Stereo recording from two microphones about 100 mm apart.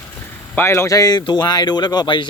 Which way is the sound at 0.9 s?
40° left (ahead or behind).